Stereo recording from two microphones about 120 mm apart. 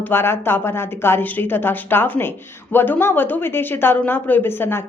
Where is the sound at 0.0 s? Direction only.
20° left (ahead or behind).